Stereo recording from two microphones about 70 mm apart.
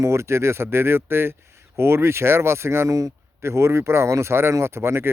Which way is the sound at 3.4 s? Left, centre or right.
Right.